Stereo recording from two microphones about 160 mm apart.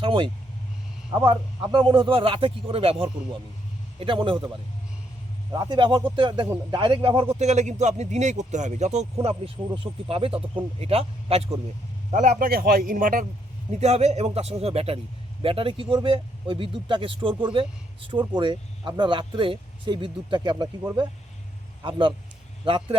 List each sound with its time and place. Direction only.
0.0 s a man's voice: 35° right (ahead or behind)
5.5 s a man's voice: 25° right (ahead or behind)
7.3 s speech: 45° right (ahead or behind)
9.2 s a man's voice: 35° right (ahead or behind)
12.1 s a man's voice: 55° right (ahead or behind)
13.7 s a man's voice: 45° right (ahead or behind); by 20.7 s 30° right (ahead or behind)
21.8 s a man's voice: 30° right (ahead or behind)